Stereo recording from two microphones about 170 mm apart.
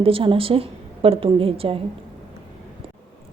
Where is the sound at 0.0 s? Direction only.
30° right (ahead or behind).